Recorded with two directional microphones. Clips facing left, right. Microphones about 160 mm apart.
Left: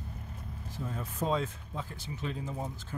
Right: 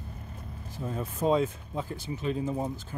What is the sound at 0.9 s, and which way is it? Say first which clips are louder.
Speech: right 6 dB; 15° right (ahead or behind).